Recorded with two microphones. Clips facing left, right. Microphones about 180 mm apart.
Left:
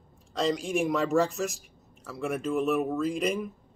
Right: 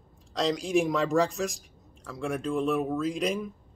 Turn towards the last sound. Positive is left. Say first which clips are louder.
# left 1 dB
turn(degrees=0)  # may be behind; listen again after turning